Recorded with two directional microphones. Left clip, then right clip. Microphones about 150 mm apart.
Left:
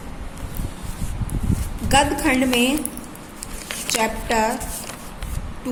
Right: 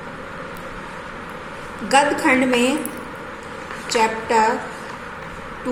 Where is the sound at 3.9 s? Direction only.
50° left (ahead or behind).